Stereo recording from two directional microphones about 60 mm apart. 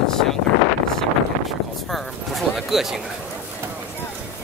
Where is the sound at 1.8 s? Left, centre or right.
Centre.